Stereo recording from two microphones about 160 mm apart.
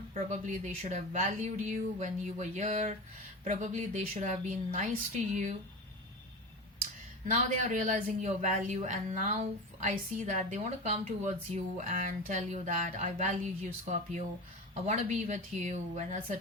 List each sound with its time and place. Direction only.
0.1 s a woman's voice: 50° right (ahead or behind)
7.3 s a woman's voice: 55° right (ahead or behind)